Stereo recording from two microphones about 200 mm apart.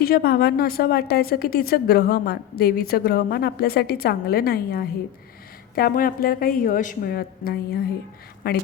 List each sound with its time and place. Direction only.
0.0 s a woman's voice: 50° left (ahead or behind)